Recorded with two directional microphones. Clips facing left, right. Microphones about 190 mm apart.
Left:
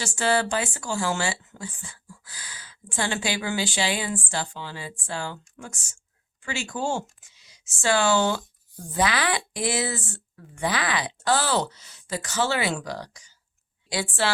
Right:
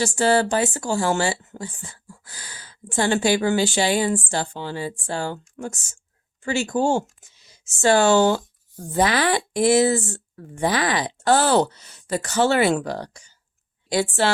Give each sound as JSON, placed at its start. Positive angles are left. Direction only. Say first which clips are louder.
{"t": 0.0, "sound": "speech", "louder": "right 5 dB", "side_deg": -40}
{"t": 13.9, "sound": "speech", "louder": "right 6 dB", "side_deg": -45}